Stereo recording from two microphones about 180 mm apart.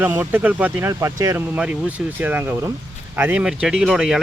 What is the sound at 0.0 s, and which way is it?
Speech, 10° right (ahead or behind).